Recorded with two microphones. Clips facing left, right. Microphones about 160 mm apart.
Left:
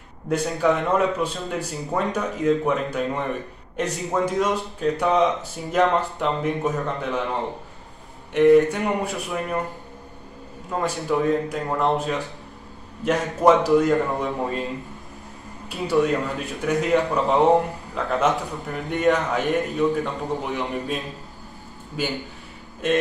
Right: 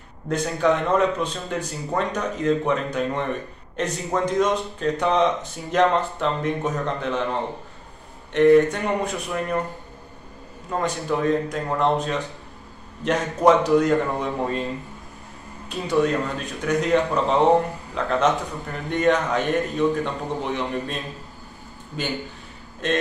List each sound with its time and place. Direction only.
0.3 s a man's voice: 10° left (ahead or behind)
8.3 s a man's voice: 10° left (ahead or behind)
10.7 s a man's voice: centre (ahead or behind)
15.9 s a man's voice: centre (ahead or behind)